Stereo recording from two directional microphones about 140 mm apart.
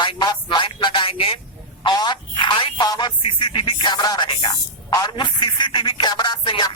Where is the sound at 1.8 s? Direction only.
30° left (ahead or behind).